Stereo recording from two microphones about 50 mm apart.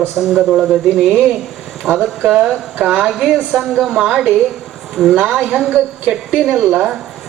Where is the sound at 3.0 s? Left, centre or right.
Centre.